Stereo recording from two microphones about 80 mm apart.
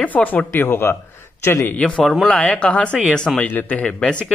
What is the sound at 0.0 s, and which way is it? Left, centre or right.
A man's voice, left.